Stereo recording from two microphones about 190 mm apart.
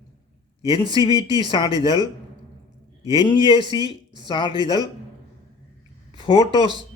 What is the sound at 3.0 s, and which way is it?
A man's voice, 20° right (ahead or behind).